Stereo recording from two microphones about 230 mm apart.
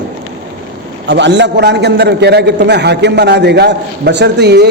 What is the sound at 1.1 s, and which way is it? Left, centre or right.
A man's voice, right.